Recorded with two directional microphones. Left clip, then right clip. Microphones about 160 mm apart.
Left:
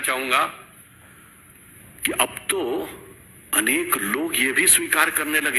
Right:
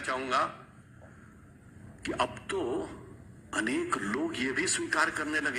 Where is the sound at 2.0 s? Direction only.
25° left (ahead or behind).